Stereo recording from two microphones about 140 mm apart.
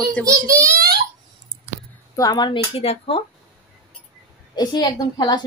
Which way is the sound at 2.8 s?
40° left (ahead or behind).